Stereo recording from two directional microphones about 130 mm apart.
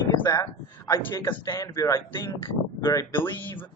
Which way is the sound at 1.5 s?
30° left (ahead or behind).